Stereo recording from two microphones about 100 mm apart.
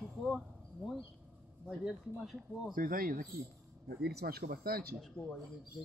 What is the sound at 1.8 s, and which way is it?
Speech, centre (ahead or behind).